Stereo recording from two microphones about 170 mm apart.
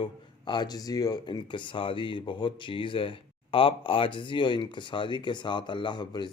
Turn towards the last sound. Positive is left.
turn(degrees=25)  # may be behind; listen again after turning